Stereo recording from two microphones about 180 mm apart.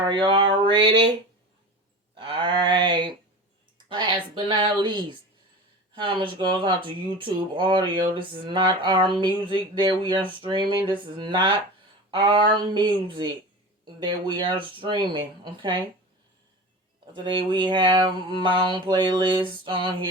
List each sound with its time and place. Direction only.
0.0 s speech: 25° right (ahead or behind)
2.1 s a sound: 30° right (ahead or behind)
3.8 s speech: 25° right (ahead or behind)
6.5 s speech: 25° right (ahead or behind)
17.2 s speech: 25° right (ahead or behind)